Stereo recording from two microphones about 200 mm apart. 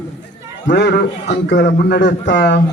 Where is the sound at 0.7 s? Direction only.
60° left (ahead or behind).